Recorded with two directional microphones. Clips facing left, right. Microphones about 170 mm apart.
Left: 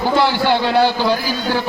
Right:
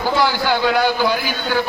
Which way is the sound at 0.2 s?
25° left (ahead or behind).